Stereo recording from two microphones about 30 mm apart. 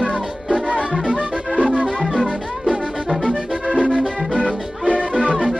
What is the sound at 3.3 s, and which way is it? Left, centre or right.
Music, left.